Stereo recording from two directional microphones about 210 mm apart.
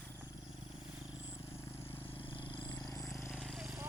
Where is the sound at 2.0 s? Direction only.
25° left (ahead or behind).